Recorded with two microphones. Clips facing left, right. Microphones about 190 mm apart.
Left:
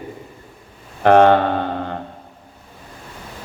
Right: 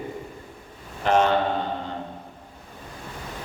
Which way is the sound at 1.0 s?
60° left (ahead or behind).